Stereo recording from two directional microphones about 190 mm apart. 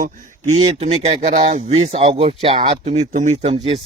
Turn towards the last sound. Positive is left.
turn(degrees=-30)  # may be behind; listen again after turning